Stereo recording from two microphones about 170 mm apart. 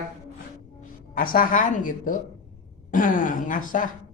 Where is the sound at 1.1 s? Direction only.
55° left (ahead or behind).